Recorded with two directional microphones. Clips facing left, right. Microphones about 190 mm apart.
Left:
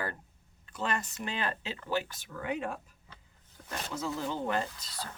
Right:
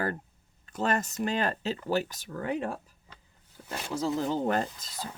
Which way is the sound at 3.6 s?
20° right (ahead or behind).